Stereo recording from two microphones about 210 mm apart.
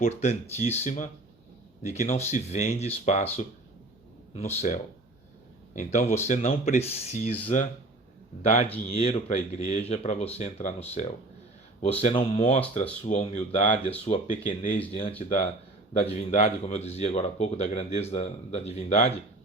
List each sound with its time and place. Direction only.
0.0 s speech: 30° left (ahead or behind)
4.5 s speech: 35° left (ahead or behind)
15.9 s speech: 30° left (ahead or behind)